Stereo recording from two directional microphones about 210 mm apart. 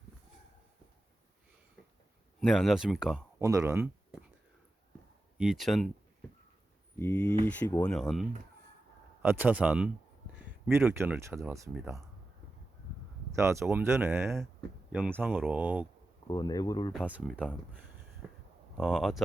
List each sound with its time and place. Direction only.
2.4 s speech: centre (ahead or behind)
3.4 s speech: 15° right (ahead or behind)
5.4 s speech: centre (ahead or behind)
7.0 s speech: 10° left (ahead or behind); by 11.8 s 10° right (ahead or behind)
13.3 s speech: 15° right (ahead or behind)
16.2 s speech: 15° left (ahead or behind)
16.9 s speech: 5° right (ahead or behind)
18.2 s a sound: 5° right (ahead or behind)
18.8 s speech: centre (ahead or behind)